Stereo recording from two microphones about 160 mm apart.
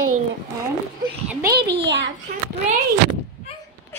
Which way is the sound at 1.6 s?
90° right.